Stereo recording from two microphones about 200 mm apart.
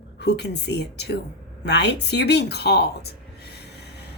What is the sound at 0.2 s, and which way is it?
Speech, 55° left (ahead or behind).